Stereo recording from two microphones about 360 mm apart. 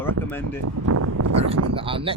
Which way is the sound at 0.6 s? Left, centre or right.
Right.